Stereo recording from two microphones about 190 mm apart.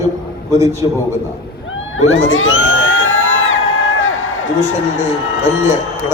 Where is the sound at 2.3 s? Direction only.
90° left.